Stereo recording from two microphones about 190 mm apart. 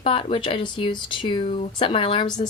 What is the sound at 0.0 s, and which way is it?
A woman's voice, 30° left (ahead or behind).